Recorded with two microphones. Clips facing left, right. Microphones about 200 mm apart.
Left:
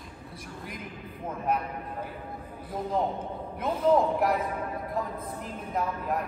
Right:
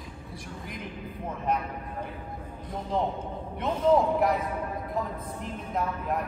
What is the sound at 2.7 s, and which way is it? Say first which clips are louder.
A man's voice: left 1 dB; 5° left (ahead or behind).